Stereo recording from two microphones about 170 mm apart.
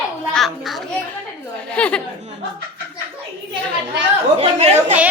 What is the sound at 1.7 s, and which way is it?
Speech, 5° left (ahead or behind).